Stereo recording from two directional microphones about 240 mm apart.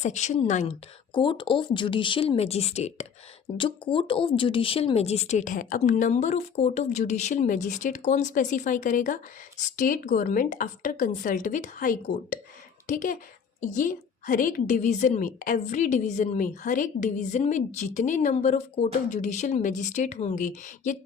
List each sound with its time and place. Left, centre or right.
0.0 s speech: left
1.1 s a woman's voice: centre